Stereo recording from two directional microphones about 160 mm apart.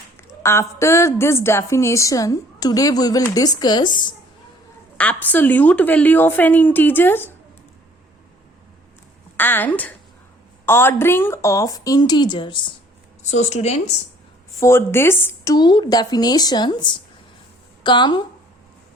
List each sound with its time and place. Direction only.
0.2 s a woman's voice: 15° left (ahead or behind)
4.9 s a woman's voice: 10° left (ahead or behind)
9.4 s a woman's voice: 10° left (ahead or behind); by 12.5 s 30° left (ahead or behind)
13.2 s speech: 45° left (ahead or behind)
14.6 s a woman's voice: 15° left (ahead or behind)
15.5 s a woman's voice: 30° left (ahead or behind)